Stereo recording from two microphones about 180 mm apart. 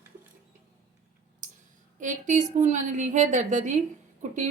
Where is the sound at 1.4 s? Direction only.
45° right (ahead or behind).